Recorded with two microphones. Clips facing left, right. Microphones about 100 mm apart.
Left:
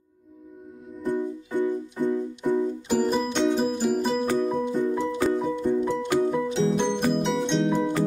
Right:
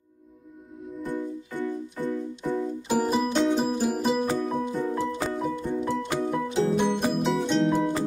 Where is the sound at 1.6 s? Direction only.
15° left (ahead or behind).